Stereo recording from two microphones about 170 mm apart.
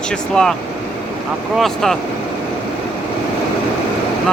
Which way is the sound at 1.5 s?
Centre (ahead or behind).